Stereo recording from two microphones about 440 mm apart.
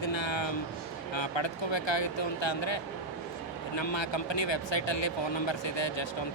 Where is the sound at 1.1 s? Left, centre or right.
Left.